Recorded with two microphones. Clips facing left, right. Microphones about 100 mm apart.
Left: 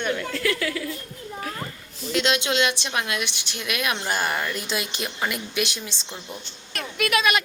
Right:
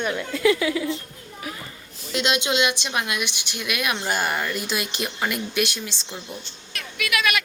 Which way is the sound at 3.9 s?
15° right (ahead or behind).